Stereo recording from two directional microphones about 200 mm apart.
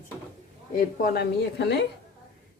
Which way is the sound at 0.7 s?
45° left (ahead or behind).